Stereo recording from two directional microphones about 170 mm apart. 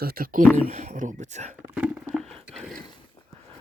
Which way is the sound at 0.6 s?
45° right (ahead or behind).